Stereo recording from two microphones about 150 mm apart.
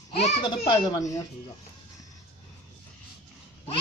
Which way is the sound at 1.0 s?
20° left (ahead or behind).